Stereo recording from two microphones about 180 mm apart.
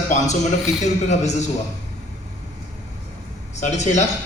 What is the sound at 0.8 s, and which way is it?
Speech, 40° left (ahead or behind).